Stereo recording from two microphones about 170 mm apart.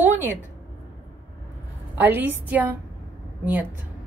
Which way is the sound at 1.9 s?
10° right (ahead or behind).